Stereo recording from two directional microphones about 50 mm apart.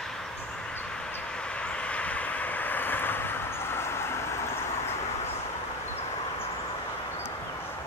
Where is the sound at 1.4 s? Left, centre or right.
Left.